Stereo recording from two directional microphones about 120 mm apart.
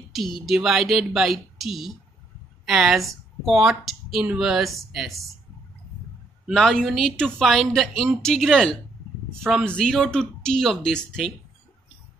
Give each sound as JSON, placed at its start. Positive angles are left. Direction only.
{"t": 0.1, "sound": "speech", "side_deg": 0}
{"t": 6.5, "sound": "speech", "side_deg": 5}